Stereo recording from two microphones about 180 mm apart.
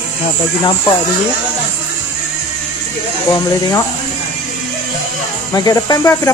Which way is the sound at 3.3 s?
25° left (ahead or behind).